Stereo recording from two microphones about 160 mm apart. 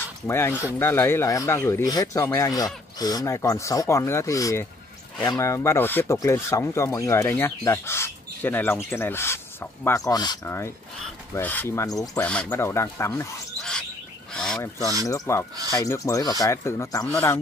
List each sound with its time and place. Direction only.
0.3 s speech: 15° left (ahead or behind)
12.2 s speech: 10° left (ahead or behind)
13.6 s bird: 5° left (ahead or behind)
14.3 s fowl: 5° left (ahead or behind)
15.0 s speech: 20° left (ahead or behind)